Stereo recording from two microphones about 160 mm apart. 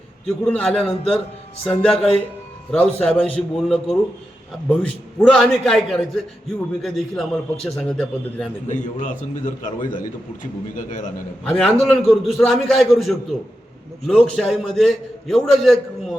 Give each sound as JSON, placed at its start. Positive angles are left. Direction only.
{"t": 0.3, "sound": "a man's voice", "side_deg": 5}
{"t": 8.6, "sound": "a man's voice", "side_deg": 50}
{"t": 11.4, "sound": "a man's voice", "side_deg": 5}